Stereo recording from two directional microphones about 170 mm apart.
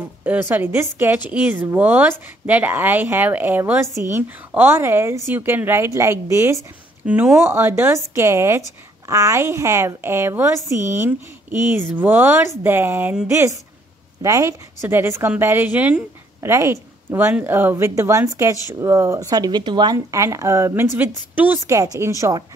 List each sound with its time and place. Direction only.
0.2 s a woman's voice: 10° right (ahead or behind)